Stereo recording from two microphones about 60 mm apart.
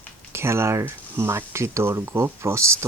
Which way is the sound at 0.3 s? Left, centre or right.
Right.